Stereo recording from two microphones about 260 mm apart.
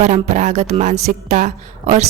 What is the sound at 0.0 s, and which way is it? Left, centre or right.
A woman's voice, right.